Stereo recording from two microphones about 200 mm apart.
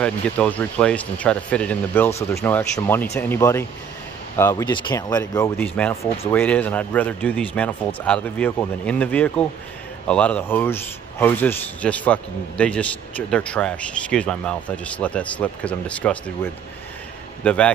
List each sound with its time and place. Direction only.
0.0 s a man's voice: 5° left (ahead or behind)
17.4 s a man's voice: 5° left (ahead or behind)